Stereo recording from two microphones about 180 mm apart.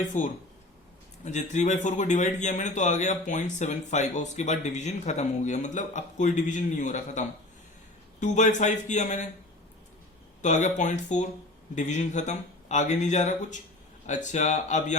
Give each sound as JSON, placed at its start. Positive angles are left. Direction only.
{"t": 0.1, "sound": "a man's voice", "side_deg": 45}
{"t": 10.4, "sound": "a man's voice", "side_deg": 40}